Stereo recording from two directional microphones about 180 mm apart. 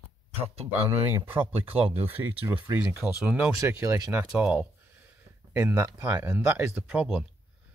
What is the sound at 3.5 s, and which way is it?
Speech, 15° right (ahead or behind).